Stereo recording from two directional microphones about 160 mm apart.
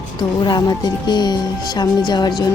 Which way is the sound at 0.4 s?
25° left (ahead or behind).